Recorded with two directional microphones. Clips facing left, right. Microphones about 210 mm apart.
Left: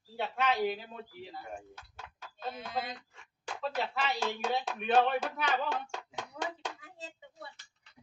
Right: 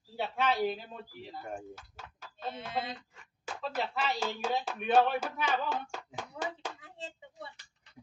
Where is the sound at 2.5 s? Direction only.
25° right (ahead or behind).